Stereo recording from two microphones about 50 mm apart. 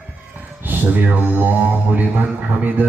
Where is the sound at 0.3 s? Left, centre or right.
Right.